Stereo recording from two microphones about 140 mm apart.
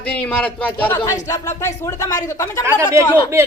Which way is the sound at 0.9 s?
25° left (ahead or behind).